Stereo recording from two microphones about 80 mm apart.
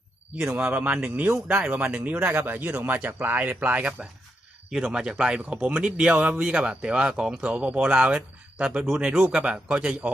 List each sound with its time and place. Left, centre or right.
0.3 s a man's voice: centre